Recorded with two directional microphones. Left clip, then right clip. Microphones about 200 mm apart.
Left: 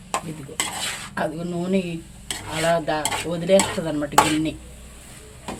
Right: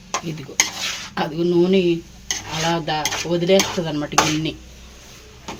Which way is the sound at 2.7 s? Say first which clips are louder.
Right 1 dB; 30° right (ahead or behind).